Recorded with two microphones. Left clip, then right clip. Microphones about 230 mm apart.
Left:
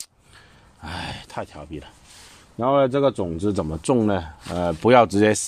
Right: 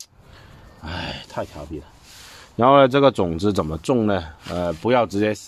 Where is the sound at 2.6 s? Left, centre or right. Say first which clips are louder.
Right 5 dB; right.